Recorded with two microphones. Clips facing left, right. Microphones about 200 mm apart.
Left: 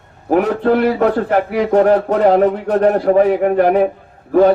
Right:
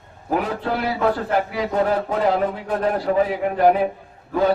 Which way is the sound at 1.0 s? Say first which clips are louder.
Left 6 dB; 55° left (ahead or behind).